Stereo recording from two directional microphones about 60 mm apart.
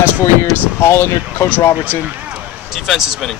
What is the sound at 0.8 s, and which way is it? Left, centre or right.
Speech, left.